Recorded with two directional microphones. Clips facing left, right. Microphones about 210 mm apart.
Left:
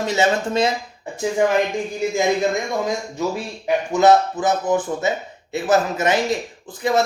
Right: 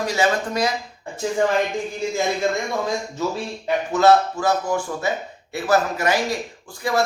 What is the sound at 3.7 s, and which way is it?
A man's voice, 15° left (ahead or behind).